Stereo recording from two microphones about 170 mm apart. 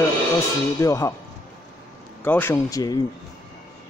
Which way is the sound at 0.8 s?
20° left (ahead or behind).